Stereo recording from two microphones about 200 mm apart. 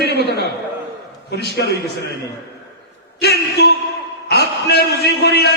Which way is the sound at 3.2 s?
55° left (ahead or behind).